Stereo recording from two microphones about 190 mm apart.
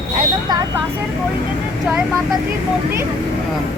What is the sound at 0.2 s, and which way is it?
Vehicle, 20° right (ahead or behind).